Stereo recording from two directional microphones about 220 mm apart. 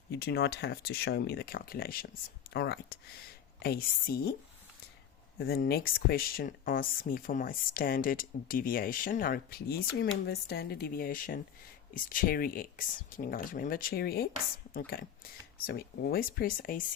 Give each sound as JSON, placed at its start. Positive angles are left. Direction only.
{"t": 0.1, "sound": "speech", "side_deg": 45}
{"t": 5.4, "sound": "speech", "side_deg": 45}